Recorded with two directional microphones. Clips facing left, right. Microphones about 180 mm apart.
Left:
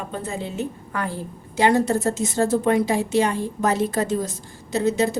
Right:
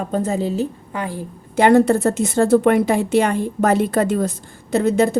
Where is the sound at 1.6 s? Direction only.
55° right (ahead or behind).